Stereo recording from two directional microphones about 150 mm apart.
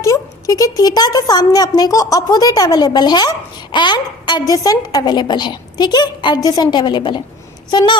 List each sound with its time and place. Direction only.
0.0 s speech: 20° left (ahead or behind)